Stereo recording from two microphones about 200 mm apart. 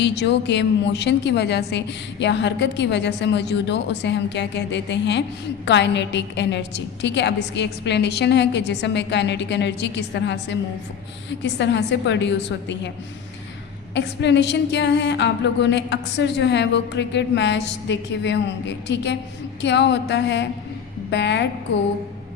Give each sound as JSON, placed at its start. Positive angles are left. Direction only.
{"t": 0.0, "sound": "a woman's voice", "side_deg": 60}
{"t": 13.9, "sound": "a woman's voice", "side_deg": 60}